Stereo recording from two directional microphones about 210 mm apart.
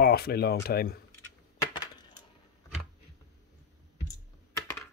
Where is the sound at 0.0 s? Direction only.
50° left (ahead or behind).